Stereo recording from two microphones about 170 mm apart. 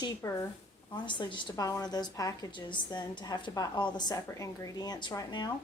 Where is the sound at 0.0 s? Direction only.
20° left (ahead or behind).